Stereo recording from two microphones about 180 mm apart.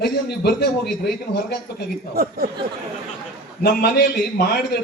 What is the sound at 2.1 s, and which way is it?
Speech, 60° right (ahead or behind).